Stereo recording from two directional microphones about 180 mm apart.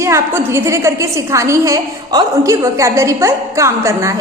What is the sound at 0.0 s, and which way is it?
A woman's voice, 15° right (ahead or behind).